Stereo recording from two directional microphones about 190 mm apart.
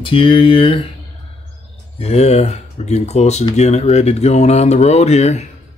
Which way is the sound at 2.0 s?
35° left (ahead or behind).